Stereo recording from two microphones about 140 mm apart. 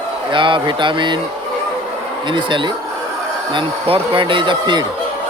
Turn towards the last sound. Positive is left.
turn(degrees=-35)  # may be behind; listen again after turning